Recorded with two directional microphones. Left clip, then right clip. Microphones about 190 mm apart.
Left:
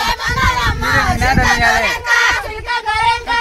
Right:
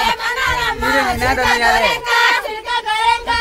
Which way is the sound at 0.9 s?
60° right (ahead or behind).